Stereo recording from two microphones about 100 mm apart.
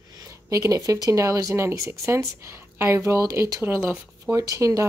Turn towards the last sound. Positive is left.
turn(degrees=-30)  # may be behind; listen again after turning